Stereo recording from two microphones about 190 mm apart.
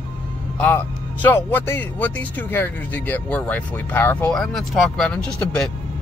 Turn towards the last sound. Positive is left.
turn(degrees=5)  # may be behind; listen again after turning